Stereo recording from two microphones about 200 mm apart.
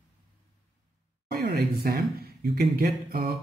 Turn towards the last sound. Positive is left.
turn(degrees=-45)  # may be behind; listen again after turning